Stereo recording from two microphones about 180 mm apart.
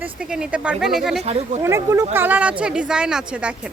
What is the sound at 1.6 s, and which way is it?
Speech, 15° right (ahead or behind).